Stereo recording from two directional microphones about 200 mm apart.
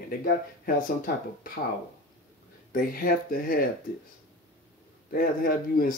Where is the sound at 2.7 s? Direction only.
45° left (ahead or behind).